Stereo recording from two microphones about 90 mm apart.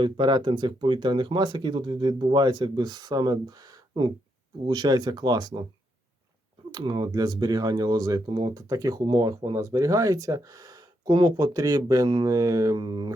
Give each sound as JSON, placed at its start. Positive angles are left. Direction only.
{"t": 0.0, "sound": "speech", "side_deg": -55}
{"t": 4.6, "sound": "speech", "side_deg": -55}
{"t": 6.7, "sound": "speech", "side_deg": -50}
{"t": 11.3, "sound": "speech", "side_deg": -40}
{"t": 12.7, "sound": "speech", "side_deg": -55}